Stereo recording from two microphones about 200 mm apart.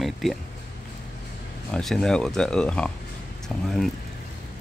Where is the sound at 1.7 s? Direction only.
5° left (ahead or behind).